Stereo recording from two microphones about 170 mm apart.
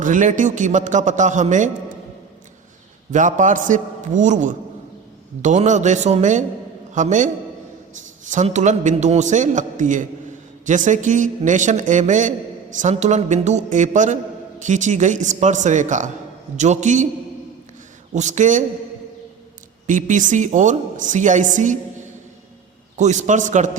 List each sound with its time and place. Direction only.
0.0 s a woman's voice: 50° right (ahead or behind)
3.1 s a woman's voice: 50° right (ahead or behind)
8.3 s a woman's voice: 45° right (ahead or behind)
18.1 s a woman's voice: 45° right (ahead or behind)
19.9 s a woman's voice: 50° right (ahead or behind)
23.0 s a woman's voice: 45° right (ahead or behind)